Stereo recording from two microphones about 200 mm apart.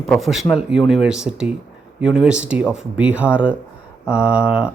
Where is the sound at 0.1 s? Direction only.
Centre (ahead or behind).